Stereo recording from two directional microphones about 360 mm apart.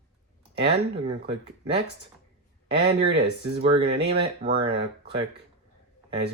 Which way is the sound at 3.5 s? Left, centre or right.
Centre.